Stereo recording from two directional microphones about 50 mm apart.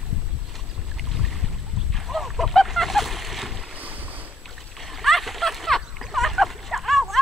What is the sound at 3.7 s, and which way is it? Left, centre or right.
Boat, right.